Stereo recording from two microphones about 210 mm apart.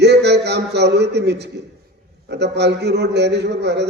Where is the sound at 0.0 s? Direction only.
55° right (ahead or behind).